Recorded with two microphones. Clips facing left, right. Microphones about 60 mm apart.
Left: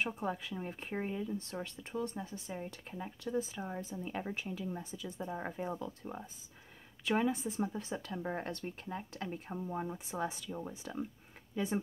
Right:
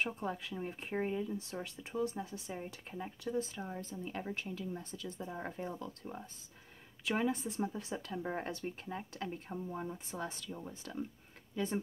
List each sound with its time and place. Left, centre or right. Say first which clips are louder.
0.0 s speech: left 1 dB; centre
3.6 s a woman's voice: left 2 dB; centre
7.1 s speech: left 2 dB; centre
9.5 s a woman's voice: left 2 dB; centre